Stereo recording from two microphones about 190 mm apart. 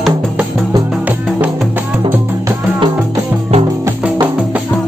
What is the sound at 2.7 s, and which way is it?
Music, 25° right (ahead or behind).